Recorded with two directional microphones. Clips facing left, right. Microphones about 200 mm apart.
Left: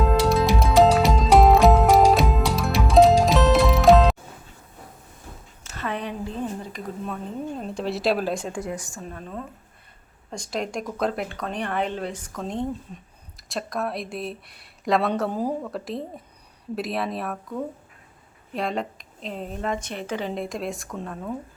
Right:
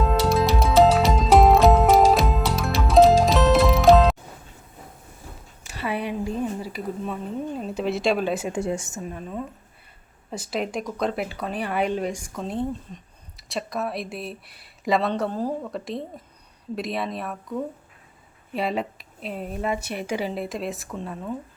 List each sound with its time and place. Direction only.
0.0 s music: centre (ahead or behind)
5.6 s a sound: 10° right (ahead or behind)
7.6 s speech: centre (ahead or behind)
8.5 s a woman's voice: 25° right (ahead or behind)
9.0 s speech: 10° right (ahead or behind)